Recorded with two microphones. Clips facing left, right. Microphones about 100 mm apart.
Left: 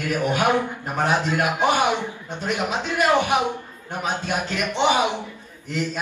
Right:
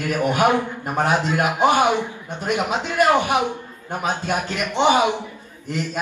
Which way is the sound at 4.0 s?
15° right (ahead or behind).